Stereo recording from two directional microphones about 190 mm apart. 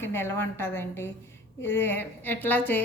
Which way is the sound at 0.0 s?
10° left (ahead or behind).